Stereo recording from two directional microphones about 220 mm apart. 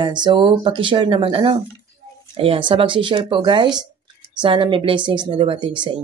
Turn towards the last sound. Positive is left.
turn(degrees=-20)  # may be behind; listen again after turning